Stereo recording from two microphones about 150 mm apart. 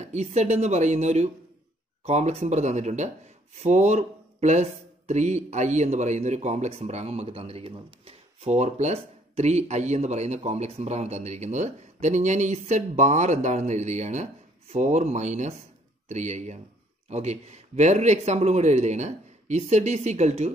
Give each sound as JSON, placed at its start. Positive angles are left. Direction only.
{"t": 0.0, "sound": "speech", "side_deg": -50}